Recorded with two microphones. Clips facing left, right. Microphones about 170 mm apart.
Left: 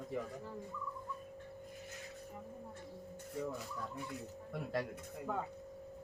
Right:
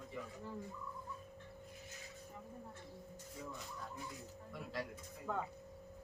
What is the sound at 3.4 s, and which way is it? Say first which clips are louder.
Speech: left 9 dB; 65° left (ahead or behind).